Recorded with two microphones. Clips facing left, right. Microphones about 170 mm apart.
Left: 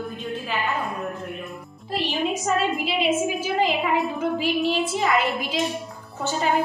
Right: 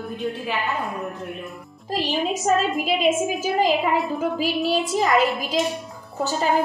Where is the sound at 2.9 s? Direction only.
40° right (ahead or behind).